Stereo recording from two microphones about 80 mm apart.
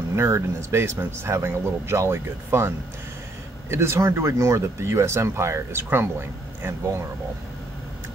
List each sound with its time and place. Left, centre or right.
0.1 s speech: right
3.7 s speech: right